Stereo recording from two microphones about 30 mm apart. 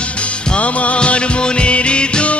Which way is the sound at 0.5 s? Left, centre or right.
Left.